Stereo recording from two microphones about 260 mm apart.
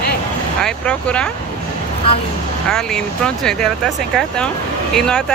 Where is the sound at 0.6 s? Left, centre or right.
Centre.